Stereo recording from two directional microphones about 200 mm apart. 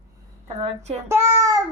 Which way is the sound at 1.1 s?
15° right (ahead or behind).